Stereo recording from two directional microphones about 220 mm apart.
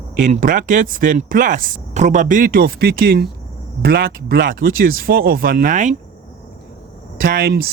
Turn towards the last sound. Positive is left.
turn(degrees=-45)  # may be behind; listen again after turning